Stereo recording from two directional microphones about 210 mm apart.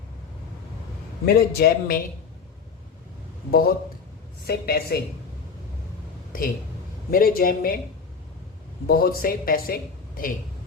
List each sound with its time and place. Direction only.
1.2 s speech: 45° left (ahead or behind)
3.5 s speech: 45° left (ahead or behind)
7.1 s speech: 45° left (ahead or behind)
8.9 s speech: 45° left (ahead or behind)